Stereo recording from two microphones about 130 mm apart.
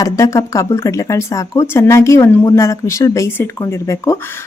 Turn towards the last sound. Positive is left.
turn(degrees=25)  # may be behind; listen again after turning